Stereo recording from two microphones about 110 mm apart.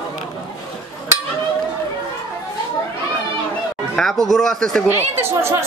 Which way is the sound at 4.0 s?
5° left (ahead or behind).